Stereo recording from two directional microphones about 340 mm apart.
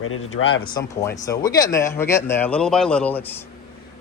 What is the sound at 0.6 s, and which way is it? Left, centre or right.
Speech, centre.